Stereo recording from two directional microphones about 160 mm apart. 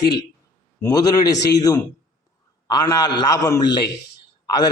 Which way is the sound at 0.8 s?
20° left (ahead or behind).